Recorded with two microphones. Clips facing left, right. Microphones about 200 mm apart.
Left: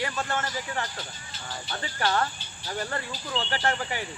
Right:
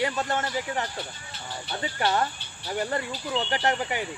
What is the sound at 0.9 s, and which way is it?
Speech, 60° right (ahead or behind).